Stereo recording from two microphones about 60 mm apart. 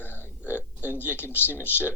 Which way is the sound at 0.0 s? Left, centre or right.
Left.